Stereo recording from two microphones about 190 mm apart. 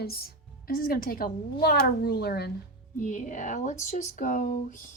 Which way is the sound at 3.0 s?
40° left (ahead or behind).